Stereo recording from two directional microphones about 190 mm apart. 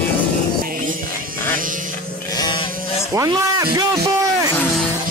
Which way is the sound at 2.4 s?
25° left (ahead or behind).